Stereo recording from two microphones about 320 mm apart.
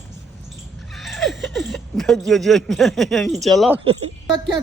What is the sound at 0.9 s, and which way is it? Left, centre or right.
A man's voice, centre.